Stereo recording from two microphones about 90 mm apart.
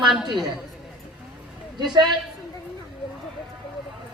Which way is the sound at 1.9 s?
55° right (ahead or behind).